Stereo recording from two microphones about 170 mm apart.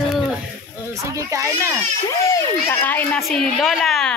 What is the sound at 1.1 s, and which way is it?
Speech, 20° right (ahead or behind).